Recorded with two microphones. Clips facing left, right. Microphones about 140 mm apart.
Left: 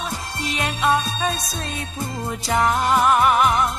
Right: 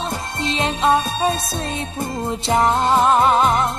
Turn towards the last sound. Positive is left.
turn(degrees=-25)  # may be behind; listen again after turning